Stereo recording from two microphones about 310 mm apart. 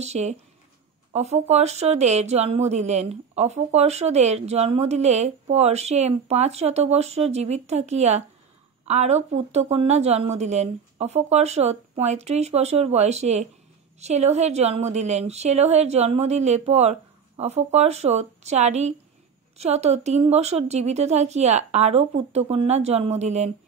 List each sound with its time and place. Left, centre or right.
0.0 s speech: right